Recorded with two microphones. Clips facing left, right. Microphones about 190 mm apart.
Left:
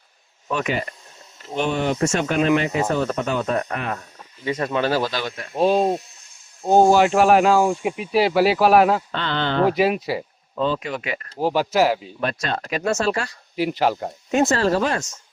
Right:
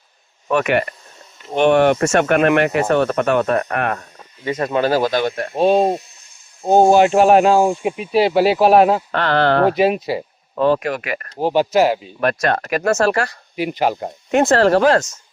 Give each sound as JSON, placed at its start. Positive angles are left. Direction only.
{"t": 0.4, "sound": "speech", "side_deg": -65}
{"t": 4.4, "sound": "speech", "side_deg": -40}
{"t": 6.9, "sound": "speech", "side_deg": -20}
{"t": 9.1, "sound": "speech", "side_deg": -70}
{"t": 9.7, "sound": "speech", "side_deg": -25}
{"t": 10.5, "sound": "speech", "side_deg": -65}
{"t": 11.3, "sound": "speech", "side_deg": -25}
{"t": 12.2, "sound": "speech", "side_deg": -65}
{"t": 13.6, "sound": "speech", "side_deg": -15}
{"t": 14.3, "sound": "speech", "side_deg": -65}